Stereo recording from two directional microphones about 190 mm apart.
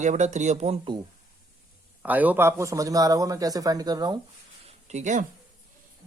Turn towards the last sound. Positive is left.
turn(degrees=-40)  # may be behind; listen again after turning